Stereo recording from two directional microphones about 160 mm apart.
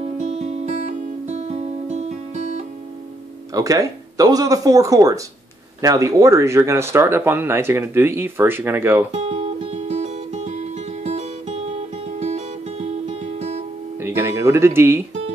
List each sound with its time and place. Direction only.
0.2 s music: 45° right (ahead or behind)
3.5 s speech: 20° right (ahead or behind)
9.1 s music: 40° right (ahead or behind)
13.9 s music: 15° right (ahead or behind)